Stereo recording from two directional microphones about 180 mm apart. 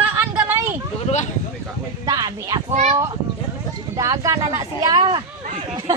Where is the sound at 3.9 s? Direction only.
15° right (ahead or behind).